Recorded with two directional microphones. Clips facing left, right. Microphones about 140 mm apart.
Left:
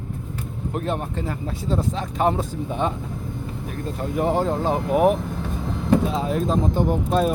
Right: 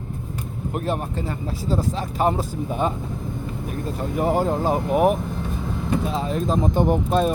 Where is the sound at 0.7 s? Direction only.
5° right (ahead or behind).